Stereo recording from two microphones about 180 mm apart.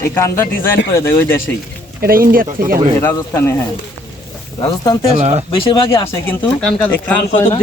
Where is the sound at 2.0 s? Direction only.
55° right (ahead or behind).